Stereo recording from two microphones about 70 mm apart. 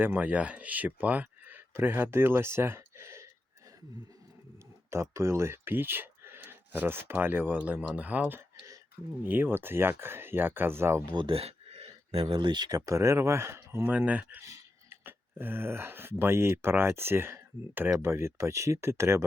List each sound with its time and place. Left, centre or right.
0.0 s speech: right
4.9 s speech: right
12.5 s speech: right
12.8 s speech: right
13.8 s speech: right